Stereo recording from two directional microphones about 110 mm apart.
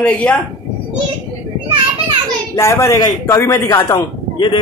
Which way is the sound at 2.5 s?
25° left (ahead or behind).